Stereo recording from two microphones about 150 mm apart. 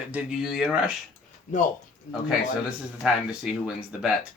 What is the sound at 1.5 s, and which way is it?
Speech, 55° left (ahead or behind).